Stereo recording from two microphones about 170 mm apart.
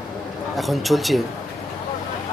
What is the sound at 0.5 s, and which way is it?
Speech, centre (ahead or behind).